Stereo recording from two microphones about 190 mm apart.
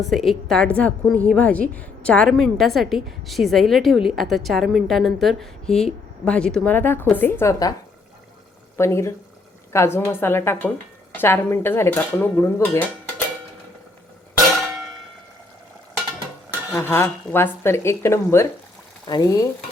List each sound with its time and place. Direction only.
0.1 s a woman's voice: centre (ahead or behind)
8.8 s speech: 15° left (ahead or behind)
16.7 s speech: 15° left (ahead or behind)
19.0 s stir: 20° left (ahead or behind)